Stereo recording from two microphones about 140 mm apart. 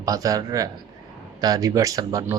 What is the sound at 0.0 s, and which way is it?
Speech, 25° right (ahead or behind).